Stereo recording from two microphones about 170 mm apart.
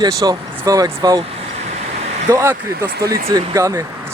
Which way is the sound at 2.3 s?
15° right (ahead or behind).